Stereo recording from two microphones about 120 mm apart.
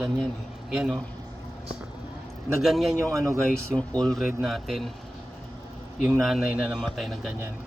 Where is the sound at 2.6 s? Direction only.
Centre (ahead or behind).